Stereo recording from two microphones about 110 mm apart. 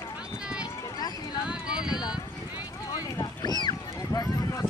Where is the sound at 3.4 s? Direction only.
40° left (ahead or behind).